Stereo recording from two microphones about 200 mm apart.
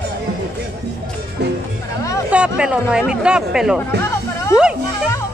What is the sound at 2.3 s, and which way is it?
Speech, 5° right (ahead or behind).